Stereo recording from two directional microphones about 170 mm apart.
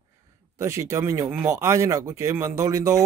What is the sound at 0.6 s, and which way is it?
Speech, 15° right (ahead or behind).